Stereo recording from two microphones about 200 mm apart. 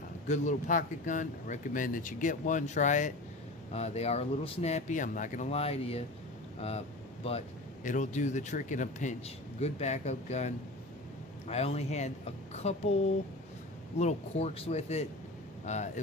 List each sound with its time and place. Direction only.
0.3 s speech: 40° left (ahead or behind)
7.9 s speech: 40° left (ahead or behind)
14.0 s speech: 35° left (ahead or behind)